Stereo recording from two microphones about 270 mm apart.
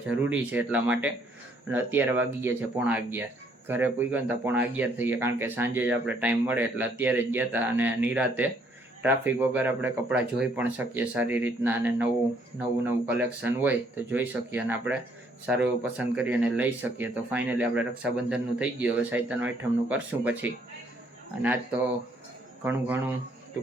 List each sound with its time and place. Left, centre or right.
0.3 s speech: centre
22.6 s speech: centre